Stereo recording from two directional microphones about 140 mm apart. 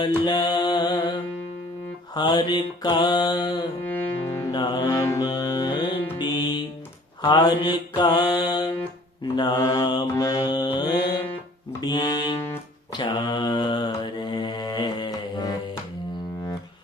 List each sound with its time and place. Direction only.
0.3 s music: 30° left (ahead or behind)
2.1 s mantra: 35° left (ahead or behind)
3.8 s music: 15° left (ahead or behind)
4.5 s mantra: 30° left (ahead or behind)
4.9 s music: 20° left (ahead or behind)
7.2 s mantra: 30° left (ahead or behind)
9.2 s mantra: 35° left (ahead or behind)
11.8 s music: 30° left (ahead or behind)
12.9 s mantra: 30° left (ahead or behind)